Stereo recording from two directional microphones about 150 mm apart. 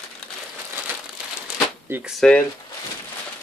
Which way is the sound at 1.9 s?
10° right (ahead or behind).